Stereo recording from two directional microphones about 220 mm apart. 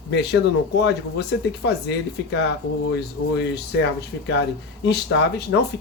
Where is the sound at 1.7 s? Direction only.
50° left (ahead or behind).